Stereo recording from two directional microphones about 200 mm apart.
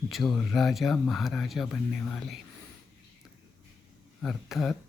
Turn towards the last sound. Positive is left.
turn(degrees=0)  # may be behind; listen again after turning